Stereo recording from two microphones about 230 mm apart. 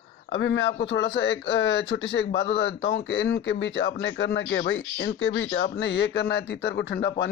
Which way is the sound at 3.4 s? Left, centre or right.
Left.